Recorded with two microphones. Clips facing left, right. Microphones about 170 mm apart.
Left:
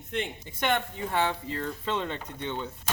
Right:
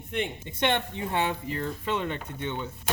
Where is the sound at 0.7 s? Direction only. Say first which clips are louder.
Left 4 dB; 20° right (ahead or behind).